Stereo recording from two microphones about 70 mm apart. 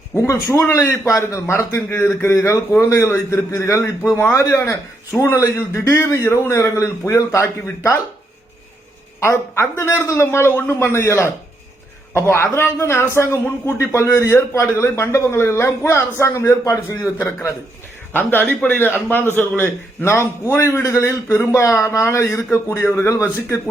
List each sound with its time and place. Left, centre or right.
0.1 s a man's voice: left
0.7 s a man's voice: left
4.2 s a man's voice: left
9.2 s a man's voice: left